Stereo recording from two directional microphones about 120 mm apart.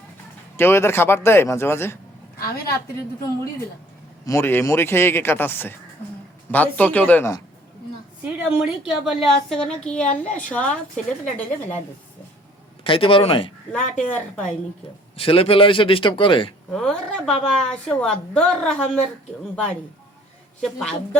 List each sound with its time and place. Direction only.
0.5 s speech: 20° left (ahead or behind)
4.3 s a woman's voice: 20° left (ahead or behind)
8.2 s a woman's voice: 10° right (ahead or behind); by 11.8 s 10° left (ahead or behind)
12.8 s a man's voice: 50° left (ahead or behind)
13.7 s a woman's voice: 10° left (ahead or behind)
15.1 s a man's voice: 50° left (ahead or behind)
16.7 s a woman's voice: 5° left (ahead or behind)
20.6 s a woman's voice: 5° left (ahead or behind)